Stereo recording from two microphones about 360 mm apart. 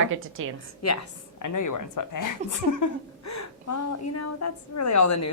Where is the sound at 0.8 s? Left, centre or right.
Left.